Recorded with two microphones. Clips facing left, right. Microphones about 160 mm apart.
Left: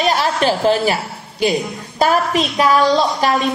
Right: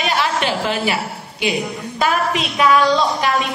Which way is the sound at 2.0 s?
40° left (ahead or behind).